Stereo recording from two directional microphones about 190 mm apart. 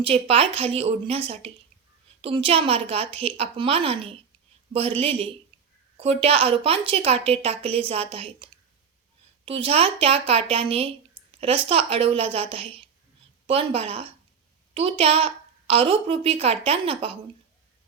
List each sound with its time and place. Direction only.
0.0 s a woman's voice: 30° right (ahead or behind)
9.5 s speech: 30° right (ahead or behind)